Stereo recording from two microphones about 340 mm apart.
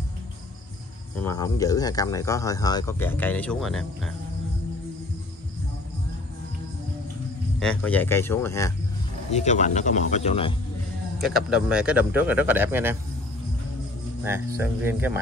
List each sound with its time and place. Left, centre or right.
1.2 s speech: centre
7.5 s speech: centre
9.3 s speech: centre
11.1 s speech: centre
14.2 s speech: centre